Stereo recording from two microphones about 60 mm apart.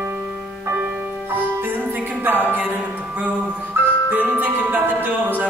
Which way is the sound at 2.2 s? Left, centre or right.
Right.